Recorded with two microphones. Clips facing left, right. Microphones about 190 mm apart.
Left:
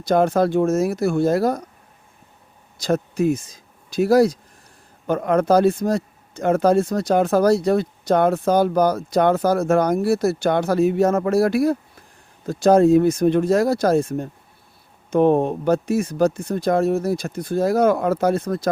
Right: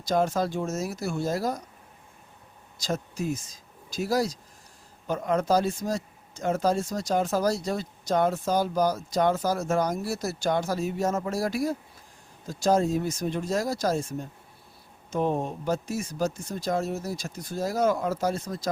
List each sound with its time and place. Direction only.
0.0 s speech: 60° left (ahead or behind)
2.7 s speech: 60° left (ahead or behind)